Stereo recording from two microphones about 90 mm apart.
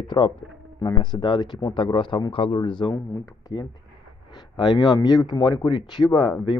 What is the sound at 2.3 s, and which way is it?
Speech, 90° left.